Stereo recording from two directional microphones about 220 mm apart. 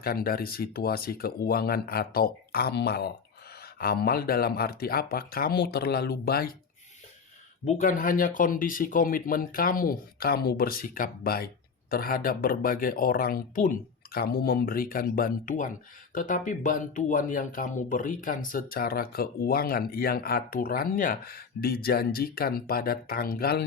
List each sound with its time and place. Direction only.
0.0 s speech: 40° left (ahead or behind)
7.6 s speech: 35° left (ahead or behind)